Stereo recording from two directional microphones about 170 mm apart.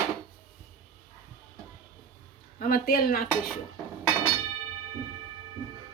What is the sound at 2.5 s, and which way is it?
Speech, 55° left (ahead or behind).